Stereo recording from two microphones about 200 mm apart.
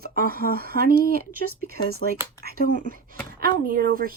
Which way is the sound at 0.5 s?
50° right (ahead or behind).